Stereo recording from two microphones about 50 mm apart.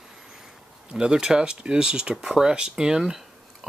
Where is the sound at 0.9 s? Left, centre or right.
Centre.